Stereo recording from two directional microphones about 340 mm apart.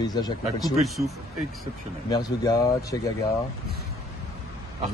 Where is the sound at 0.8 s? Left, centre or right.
Centre.